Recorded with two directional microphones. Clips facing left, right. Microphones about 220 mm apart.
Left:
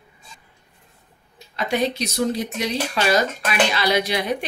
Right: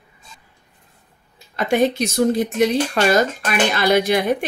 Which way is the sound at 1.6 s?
50° right (ahead or behind).